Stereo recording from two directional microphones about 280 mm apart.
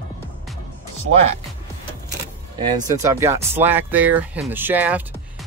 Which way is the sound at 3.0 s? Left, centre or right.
Centre.